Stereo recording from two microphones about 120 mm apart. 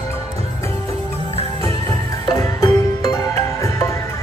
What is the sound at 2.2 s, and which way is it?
Music, 30° left (ahead or behind).